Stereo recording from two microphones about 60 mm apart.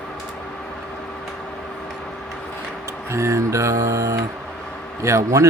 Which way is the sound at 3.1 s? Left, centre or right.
Right.